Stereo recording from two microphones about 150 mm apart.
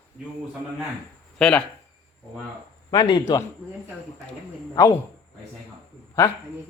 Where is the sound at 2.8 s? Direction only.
30° left (ahead or behind).